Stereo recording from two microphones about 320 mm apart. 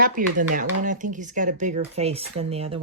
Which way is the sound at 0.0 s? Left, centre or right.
Right.